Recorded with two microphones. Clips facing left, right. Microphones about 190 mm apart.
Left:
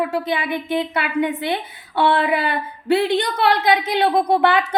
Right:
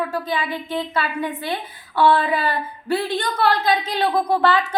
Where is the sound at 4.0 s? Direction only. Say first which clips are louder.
Left 2 dB; 20° left (ahead or behind).